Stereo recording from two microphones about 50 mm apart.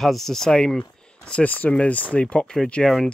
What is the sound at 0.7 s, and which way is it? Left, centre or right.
Speech, left.